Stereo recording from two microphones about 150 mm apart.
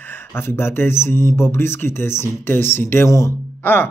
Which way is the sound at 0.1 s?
15° left (ahead or behind).